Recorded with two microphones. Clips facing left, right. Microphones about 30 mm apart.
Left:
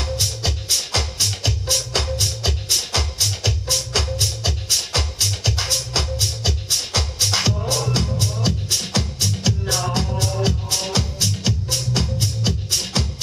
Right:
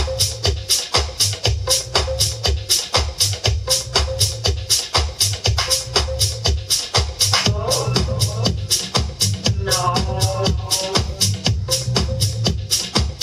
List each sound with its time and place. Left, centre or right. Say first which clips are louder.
0.1 s music: right 3 dB; centre